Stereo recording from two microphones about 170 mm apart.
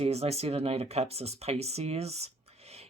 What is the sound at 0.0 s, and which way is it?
Speech, 35° right (ahead or behind).